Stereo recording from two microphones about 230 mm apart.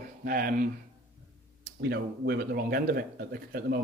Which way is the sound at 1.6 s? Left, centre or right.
Right.